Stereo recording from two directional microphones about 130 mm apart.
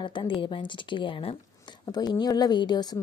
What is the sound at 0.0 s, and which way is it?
Speech, 35° left (ahead or behind).